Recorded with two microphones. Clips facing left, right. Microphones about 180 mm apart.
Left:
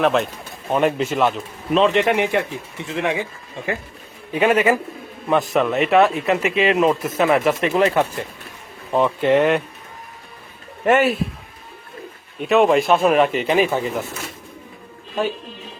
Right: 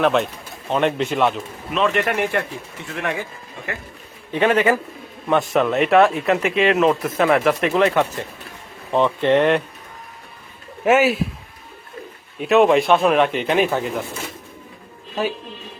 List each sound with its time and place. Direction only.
0.0 s speech: centre (ahead or behind)
1.9 s speech: 20° left (ahead or behind)
4.3 s speech: 10° left (ahead or behind)
10.8 s speech: 5° right (ahead or behind)
12.4 s speech: centre (ahead or behind)